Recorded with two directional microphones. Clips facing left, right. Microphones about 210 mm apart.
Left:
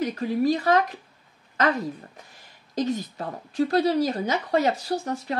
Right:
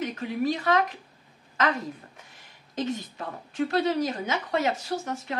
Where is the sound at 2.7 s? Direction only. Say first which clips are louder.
Left 4 dB; 35° left (ahead or behind).